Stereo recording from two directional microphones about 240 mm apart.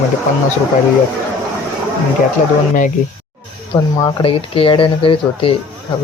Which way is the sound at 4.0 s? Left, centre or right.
Centre.